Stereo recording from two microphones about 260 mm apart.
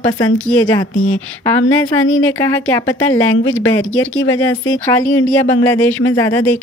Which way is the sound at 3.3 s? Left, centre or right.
Left.